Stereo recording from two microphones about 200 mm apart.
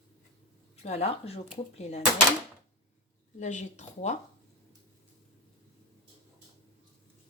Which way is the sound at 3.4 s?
35° left (ahead or behind).